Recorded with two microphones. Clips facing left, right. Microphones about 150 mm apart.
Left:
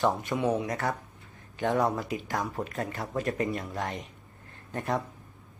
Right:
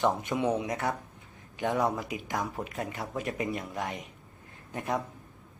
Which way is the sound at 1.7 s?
Centre (ahead or behind).